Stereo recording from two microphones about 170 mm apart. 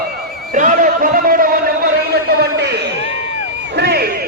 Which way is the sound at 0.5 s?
50° right (ahead or behind).